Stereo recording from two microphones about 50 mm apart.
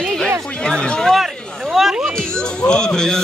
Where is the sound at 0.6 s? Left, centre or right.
Centre.